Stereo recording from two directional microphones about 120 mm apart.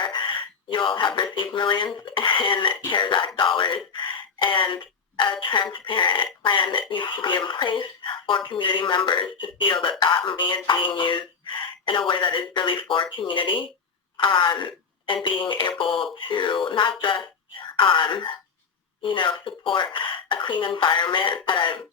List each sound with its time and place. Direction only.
0.0 s speech: 40° left (ahead or behind)